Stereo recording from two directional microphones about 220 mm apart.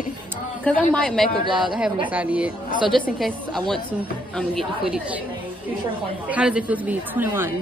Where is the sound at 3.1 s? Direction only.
Centre (ahead or behind).